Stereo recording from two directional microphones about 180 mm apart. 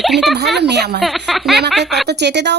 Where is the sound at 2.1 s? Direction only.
70° right (ahead or behind).